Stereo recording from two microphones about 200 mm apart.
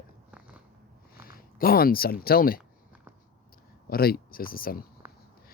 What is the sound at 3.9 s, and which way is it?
Speech, 50° left (ahead or behind).